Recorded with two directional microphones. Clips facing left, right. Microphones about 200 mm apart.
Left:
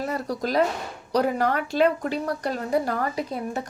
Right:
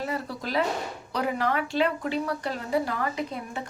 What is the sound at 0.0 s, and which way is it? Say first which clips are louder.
A woman's voice: left 4 dB; 40° left (ahead or behind).